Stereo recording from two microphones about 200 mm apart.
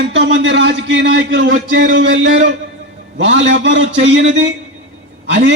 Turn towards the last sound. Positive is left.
turn(degrees=-60)  # may be behind; listen again after turning